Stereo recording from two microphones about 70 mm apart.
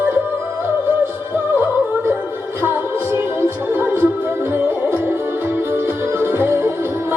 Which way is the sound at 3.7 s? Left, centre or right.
Right.